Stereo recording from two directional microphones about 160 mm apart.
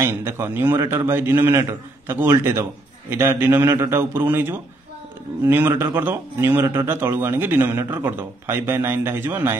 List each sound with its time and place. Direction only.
0.0 s speech: 15° right (ahead or behind)